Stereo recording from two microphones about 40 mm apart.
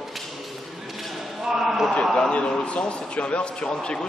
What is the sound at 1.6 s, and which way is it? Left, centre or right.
Speech, centre.